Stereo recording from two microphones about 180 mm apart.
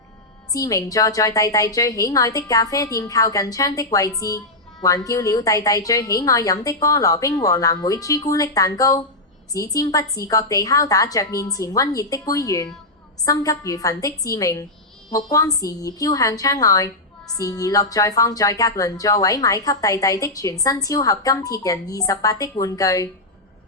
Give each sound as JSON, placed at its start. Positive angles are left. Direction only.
{"t": 0.5, "sound": "a woman's voice", "side_deg": 20}